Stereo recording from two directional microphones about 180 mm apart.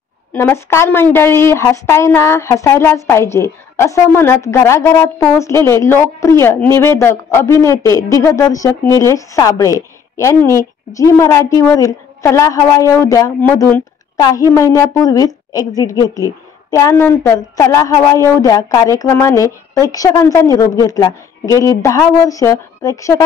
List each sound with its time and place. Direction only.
0.3 s a woman's voice: 10° left (ahead or behind)